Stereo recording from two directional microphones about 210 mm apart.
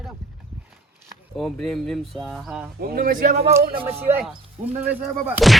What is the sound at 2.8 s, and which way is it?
Speech, 45° right (ahead or behind).